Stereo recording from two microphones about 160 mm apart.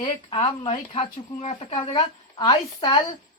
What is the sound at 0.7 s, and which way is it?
A woman's voice, 45° left (ahead or behind).